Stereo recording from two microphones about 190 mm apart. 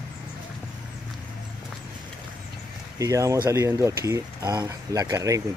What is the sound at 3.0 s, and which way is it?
Speech, 15° right (ahead or behind).